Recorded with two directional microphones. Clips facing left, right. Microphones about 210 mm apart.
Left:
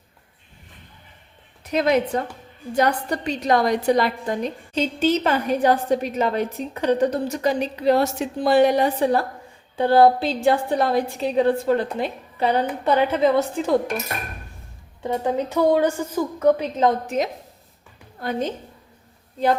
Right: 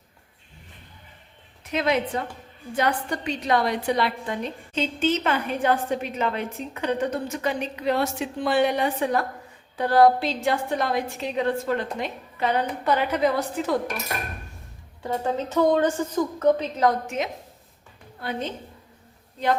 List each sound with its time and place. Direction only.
1.7 s a woman's voice: 45° left (ahead or behind); by 13.7 s 25° left (ahead or behind)
15.0 s a woman's voice: 15° left (ahead or behind)
16.7 s a woman's voice: 25° left (ahead or behind)
18.2 s a woman's voice: 40° left (ahead or behind)